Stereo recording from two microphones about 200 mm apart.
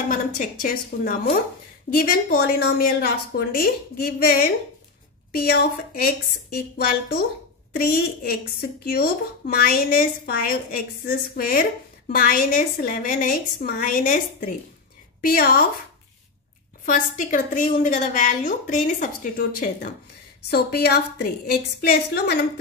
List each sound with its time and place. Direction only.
0.1 s a woman's voice: 45° left (ahead or behind)
16.8 s a woman's voice: 40° left (ahead or behind)